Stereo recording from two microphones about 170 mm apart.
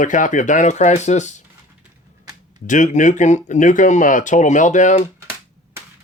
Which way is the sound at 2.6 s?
50° left (ahead or behind).